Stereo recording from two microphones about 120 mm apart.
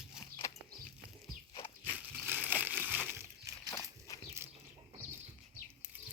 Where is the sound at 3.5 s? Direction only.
25° right (ahead or behind).